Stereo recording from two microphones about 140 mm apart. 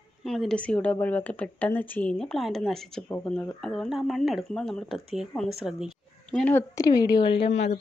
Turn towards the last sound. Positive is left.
turn(degrees=50)  # may be behind; listen again after turning